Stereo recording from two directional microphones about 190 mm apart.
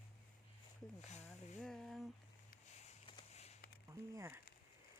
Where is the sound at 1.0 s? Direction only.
35° left (ahead or behind).